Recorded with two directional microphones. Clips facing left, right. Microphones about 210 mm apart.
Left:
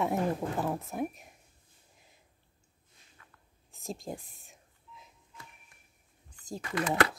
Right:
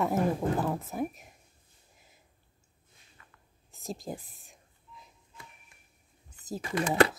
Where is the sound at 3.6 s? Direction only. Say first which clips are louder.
Right 1 dB; centre (ahead or behind).